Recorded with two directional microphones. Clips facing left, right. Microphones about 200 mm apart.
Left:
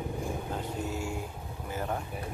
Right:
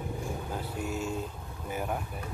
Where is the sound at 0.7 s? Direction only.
20° left (ahead or behind).